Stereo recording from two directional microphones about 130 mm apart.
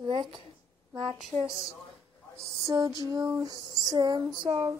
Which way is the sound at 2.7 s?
25° right (ahead or behind).